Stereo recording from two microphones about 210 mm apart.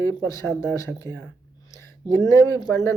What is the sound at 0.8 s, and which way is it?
Speech, 15° left (ahead or behind).